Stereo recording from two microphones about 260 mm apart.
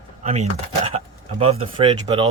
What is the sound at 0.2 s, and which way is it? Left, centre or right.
Speech, right.